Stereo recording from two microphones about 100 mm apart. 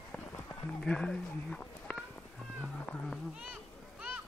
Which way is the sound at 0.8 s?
5° left (ahead or behind).